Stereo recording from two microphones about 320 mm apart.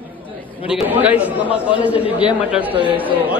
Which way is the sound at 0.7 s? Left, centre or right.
Centre.